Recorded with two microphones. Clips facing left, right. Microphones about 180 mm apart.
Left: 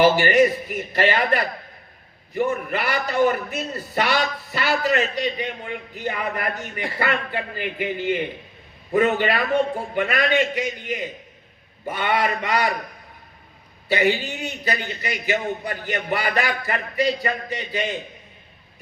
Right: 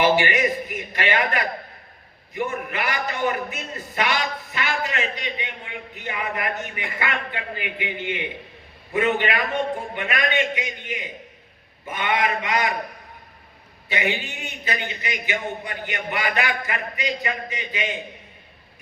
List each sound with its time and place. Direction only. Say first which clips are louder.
0.0 s a man's voice: left 4 dB; 35° left (ahead or behind)
13.8 s a man's voice: left 6 dB; 40° left (ahead or behind)